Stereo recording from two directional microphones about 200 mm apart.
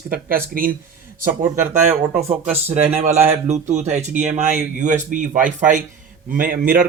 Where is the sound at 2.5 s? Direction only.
10° right (ahead or behind).